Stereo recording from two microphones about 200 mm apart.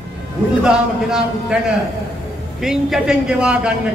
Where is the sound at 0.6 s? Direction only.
5° right (ahead or behind).